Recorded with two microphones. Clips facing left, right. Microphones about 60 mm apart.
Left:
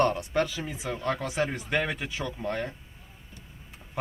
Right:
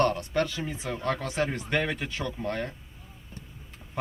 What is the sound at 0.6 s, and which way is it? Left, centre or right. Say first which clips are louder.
Speech: right 1 dB; centre.